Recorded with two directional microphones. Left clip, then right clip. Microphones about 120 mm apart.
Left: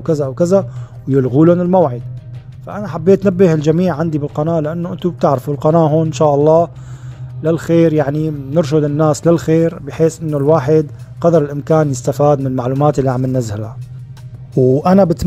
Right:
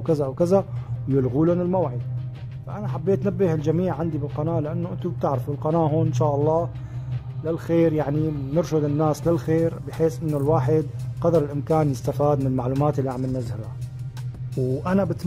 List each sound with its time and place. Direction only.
0.0 s a man's voice: 25° left (ahead or behind)
1.4 s a man's voice: 45° left (ahead or behind); by 13.7 s 60° left (ahead or behind)
14.5 s speech: 15° left (ahead or behind)
14.8 s a man's voice: 55° left (ahead or behind)